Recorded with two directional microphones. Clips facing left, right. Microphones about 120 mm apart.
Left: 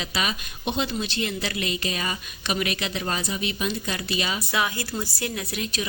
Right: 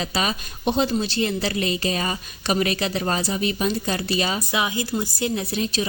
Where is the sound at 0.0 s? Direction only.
40° right (ahead or behind).